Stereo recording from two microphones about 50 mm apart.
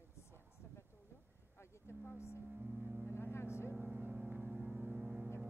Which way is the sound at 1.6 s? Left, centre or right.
Left.